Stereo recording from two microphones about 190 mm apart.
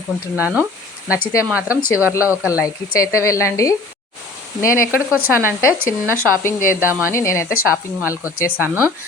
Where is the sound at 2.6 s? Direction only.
15° left (ahead or behind).